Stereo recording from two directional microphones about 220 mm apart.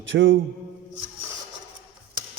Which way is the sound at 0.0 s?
60° right (ahead or behind).